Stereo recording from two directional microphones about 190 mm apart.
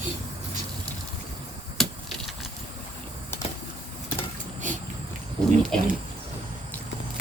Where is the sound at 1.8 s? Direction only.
Centre (ahead or behind).